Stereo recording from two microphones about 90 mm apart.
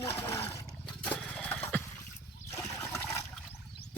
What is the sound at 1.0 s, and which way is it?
Vehicle, 15° left (ahead or behind).